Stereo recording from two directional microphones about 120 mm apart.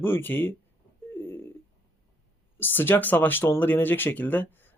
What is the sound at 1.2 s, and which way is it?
Telephone, 20° left (ahead or behind).